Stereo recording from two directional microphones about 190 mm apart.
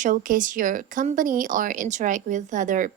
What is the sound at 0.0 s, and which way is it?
A woman's voice, 45° right (ahead or behind).